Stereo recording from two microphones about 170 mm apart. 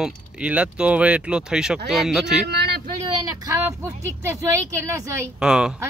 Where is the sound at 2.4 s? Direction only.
75° right (ahead or behind).